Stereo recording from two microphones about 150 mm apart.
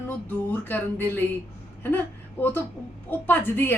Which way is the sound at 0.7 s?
15° left (ahead or behind).